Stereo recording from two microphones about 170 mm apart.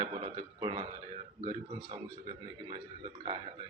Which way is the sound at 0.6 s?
30° right (ahead or behind).